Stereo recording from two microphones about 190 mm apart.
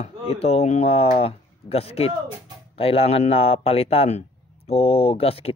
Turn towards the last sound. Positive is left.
turn(degrees=30)  # may be behind; listen again after turning